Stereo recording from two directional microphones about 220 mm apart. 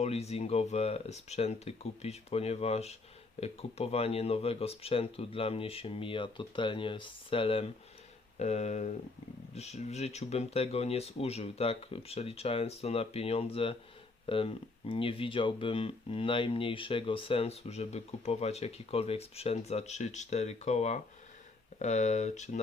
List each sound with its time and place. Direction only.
0.0 s speech: 30° left (ahead or behind)